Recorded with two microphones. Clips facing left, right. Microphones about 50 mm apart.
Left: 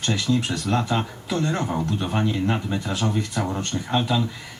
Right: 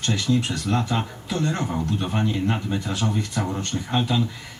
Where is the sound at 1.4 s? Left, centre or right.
Centre.